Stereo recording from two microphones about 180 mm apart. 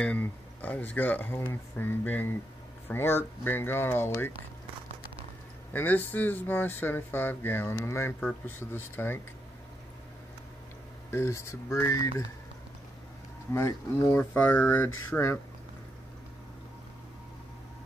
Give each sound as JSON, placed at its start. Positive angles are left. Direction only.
{"t": 0.0, "sound": "speech", "side_deg": 10}
{"t": 5.7, "sound": "speech", "side_deg": 10}
{"t": 11.1, "sound": "speech", "side_deg": 15}
{"t": 13.5, "sound": "speech", "side_deg": 15}